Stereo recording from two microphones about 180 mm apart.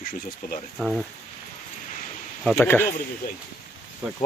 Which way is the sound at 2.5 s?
10° left (ahead or behind).